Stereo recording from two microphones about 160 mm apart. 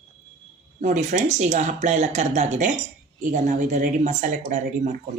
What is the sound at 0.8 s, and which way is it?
Speech, 50° right (ahead or behind).